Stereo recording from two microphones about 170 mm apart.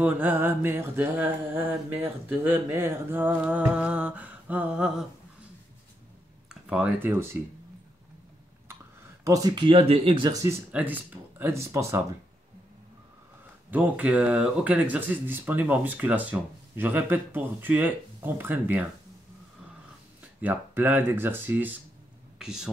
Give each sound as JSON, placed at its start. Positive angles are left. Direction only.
{"t": 0.0, "sound": "speech", "side_deg": -10}
{"t": 6.5, "sound": "speech", "side_deg": -5}
{"t": 9.2, "sound": "speech", "side_deg": -20}
{"t": 10.7, "sound": "speech", "side_deg": -10}
{"t": 13.7, "sound": "speech", "side_deg": -10}
{"t": 20.3, "sound": "speech", "side_deg": -10}